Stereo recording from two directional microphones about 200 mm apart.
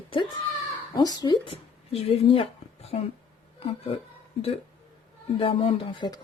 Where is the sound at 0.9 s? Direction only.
20° left (ahead or behind).